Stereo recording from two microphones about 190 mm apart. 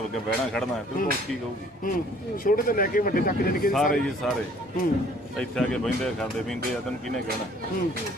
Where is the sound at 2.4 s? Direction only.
50° left (ahead or behind).